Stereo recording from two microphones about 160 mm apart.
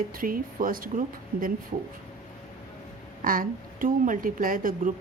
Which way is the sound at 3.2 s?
60° right (ahead or behind).